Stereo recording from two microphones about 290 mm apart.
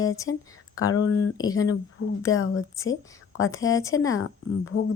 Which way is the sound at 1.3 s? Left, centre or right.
Centre.